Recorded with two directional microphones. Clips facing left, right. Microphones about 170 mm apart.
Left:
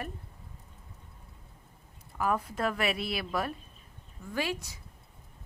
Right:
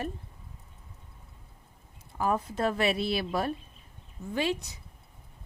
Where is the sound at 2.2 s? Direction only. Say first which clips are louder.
Right 2 dB; 25° right (ahead or behind).